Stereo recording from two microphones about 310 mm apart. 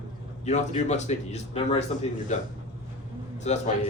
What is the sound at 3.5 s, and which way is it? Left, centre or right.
Speech, left.